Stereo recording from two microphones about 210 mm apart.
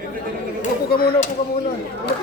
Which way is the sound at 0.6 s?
40° left (ahead or behind).